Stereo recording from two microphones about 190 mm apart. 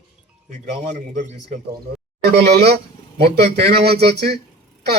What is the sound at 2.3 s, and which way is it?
A man's voice, 60° right (ahead or behind).